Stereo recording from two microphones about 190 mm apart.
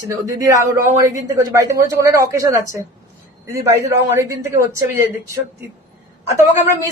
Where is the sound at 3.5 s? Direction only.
15° right (ahead or behind).